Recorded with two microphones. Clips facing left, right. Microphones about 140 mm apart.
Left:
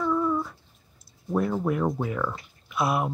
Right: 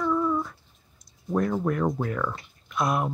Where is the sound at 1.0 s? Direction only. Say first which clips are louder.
Even; 5° left (ahead or behind).